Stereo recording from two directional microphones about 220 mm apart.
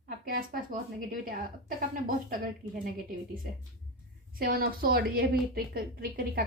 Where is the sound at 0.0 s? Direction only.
45° right (ahead or behind).